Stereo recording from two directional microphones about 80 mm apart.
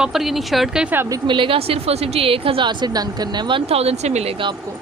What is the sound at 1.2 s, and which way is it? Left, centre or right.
Speech, right.